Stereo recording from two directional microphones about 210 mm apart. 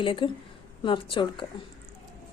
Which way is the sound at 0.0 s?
25° left (ahead or behind).